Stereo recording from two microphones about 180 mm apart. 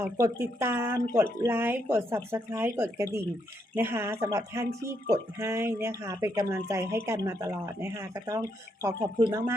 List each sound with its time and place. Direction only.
0.0 s speech: 15° right (ahead or behind)